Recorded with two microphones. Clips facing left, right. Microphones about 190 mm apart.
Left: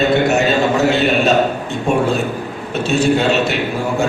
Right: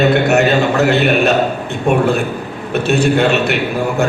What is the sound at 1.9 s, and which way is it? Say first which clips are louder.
A man's voice: right 2 dB; 60° right (ahead or behind).